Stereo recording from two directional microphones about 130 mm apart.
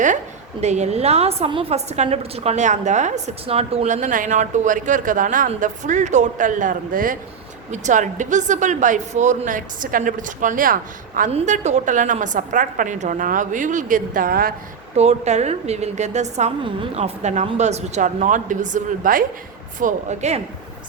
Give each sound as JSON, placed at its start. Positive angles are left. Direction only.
{"t": 0.6, "sound": "a woman's voice", "side_deg": -60}
{"t": 3.4, "sound": "speech", "side_deg": -50}
{"t": 3.8, "sound": "a woman's voice", "side_deg": -75}
{"t": 5.5, "sound": "a woman's voice", "side_deg": -70}
{"t": 7.7, "sound": "a woman's voice", "side_deg": -70}
{"t": 11.3, "sound": "a woman's voice", "side_deg": -60}
{"t": 14.9, "sound": "a woman's voice", "side_deg": -60}
{"t": 16.6, "sound": "a woman's voice", "side_deg": -45}
{"t": 19.8, "sound": "a woman's voice", "side_deg": -60}